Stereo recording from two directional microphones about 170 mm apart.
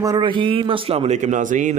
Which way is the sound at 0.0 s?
25° right (ahead or behind).